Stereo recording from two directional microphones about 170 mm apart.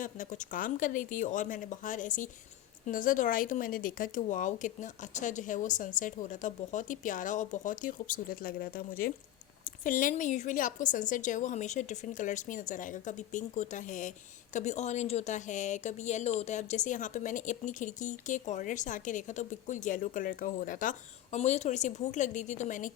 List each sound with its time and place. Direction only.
0.0 s a woman's voice: 50° left (ahead or behind)
21.3 s a woman's voice: 40° left (ahead or behind)